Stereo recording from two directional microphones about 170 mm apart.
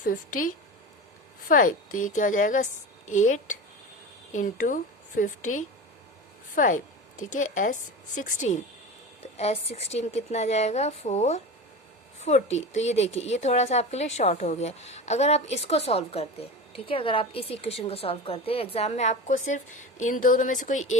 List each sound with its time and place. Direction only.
0.0 s a woman's voice: 55° left (ahead or behind)
1.5 s a woman's voice: 55° left (ahead or behind)